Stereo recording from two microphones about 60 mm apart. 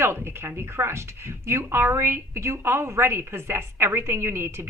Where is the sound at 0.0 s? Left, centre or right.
Right.